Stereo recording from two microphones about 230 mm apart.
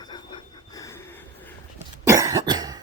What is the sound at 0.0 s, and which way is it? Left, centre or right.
Train, centre.